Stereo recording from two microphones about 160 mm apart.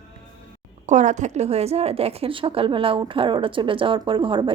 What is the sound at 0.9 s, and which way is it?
A woman's voice, 50° right (ahead or behind).